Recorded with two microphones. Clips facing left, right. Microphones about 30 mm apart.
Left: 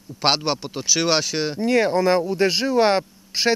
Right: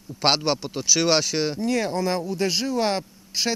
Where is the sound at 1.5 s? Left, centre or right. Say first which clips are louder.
Left 5 dB; left.